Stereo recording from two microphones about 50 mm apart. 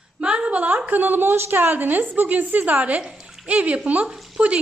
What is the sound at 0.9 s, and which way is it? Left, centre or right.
A woman's voice, right.